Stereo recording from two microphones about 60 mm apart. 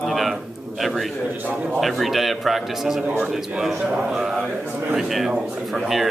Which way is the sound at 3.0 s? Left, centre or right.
Right.